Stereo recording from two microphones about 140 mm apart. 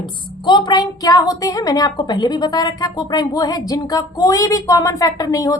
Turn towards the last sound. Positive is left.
turn(degrees=25)  # may be behind; listen again after turning